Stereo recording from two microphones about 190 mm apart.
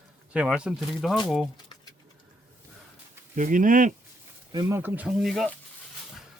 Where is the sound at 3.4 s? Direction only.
45° right (ahead or behind).